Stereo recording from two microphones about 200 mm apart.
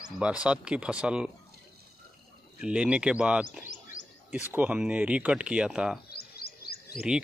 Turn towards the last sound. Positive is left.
turn(degrees=50)  # may be behind; listen again after turning